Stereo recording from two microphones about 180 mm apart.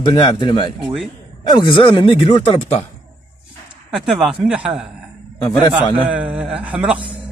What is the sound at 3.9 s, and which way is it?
Speech, centre (ahead or behind).